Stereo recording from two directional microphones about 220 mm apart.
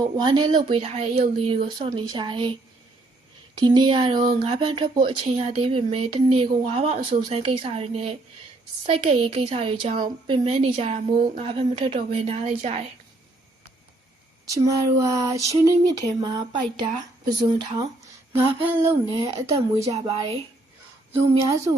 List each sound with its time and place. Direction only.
0.0 s speech: 20° right (ahead or behind)
3.6 s speech: 20° right (ahead or behind)
14.4 s speech: 15° right (ahead or behind)
19.1 s speech: 15° right (ahead or behind)
19.9 s speech: 25° right (ahead or behind)
21.1 s speech: 15° right (ahead or behind)